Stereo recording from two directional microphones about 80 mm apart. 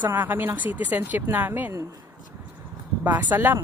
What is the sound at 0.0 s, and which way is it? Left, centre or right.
Speech, right.